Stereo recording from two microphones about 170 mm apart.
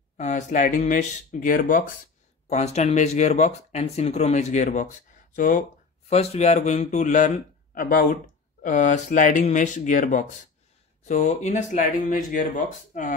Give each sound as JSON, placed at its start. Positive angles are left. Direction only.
{"t": 0.2, "sound": "speech", "side_deg": 50}
{"t": 2.4, "sound": "speech", "side_deg": 40}
{"t": 6.0, "sound": "speech", "side_deg": 40}